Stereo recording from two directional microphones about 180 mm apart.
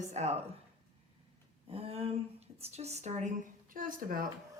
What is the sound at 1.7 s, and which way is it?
A woman's voice, 35° right (ahead or behind).